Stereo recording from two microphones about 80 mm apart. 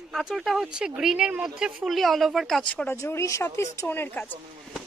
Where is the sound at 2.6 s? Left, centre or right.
Left.